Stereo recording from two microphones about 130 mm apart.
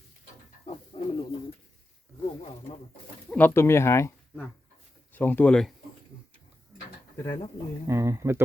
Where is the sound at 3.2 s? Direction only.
15° left (ahead or behind).